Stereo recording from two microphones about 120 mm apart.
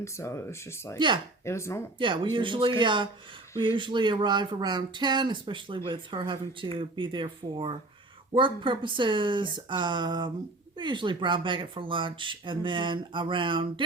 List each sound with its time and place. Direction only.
0.0 s speech: 25° left (ahead or behind)
0.9 s speech: 40° right (ahead or behind)
1.5 s speech: 25° left (ahead or behind)
2.0 s speech: 45° right (ahead or behind)